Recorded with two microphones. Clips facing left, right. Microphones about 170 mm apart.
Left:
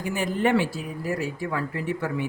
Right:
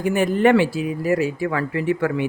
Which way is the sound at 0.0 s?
60° right (ahead or behind).